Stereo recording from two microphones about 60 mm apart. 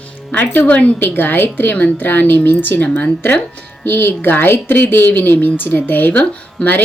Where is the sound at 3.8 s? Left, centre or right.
Left.